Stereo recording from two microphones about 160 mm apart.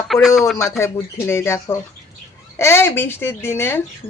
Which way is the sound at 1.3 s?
15° left (ahead or behind).